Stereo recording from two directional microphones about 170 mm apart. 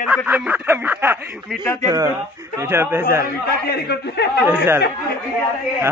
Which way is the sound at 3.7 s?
75° left (ahead or behind).